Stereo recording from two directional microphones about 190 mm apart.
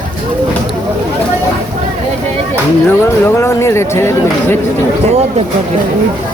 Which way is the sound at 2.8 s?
10° left (ahead or behind).